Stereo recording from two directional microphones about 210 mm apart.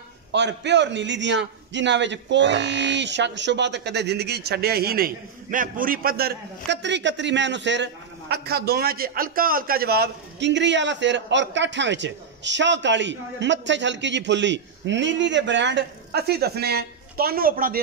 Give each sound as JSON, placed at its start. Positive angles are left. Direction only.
{"t": 0.3, "sound": "a man's voice", "side_deg": -55}